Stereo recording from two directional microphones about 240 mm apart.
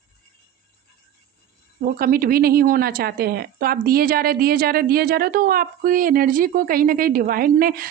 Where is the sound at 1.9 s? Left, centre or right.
Right.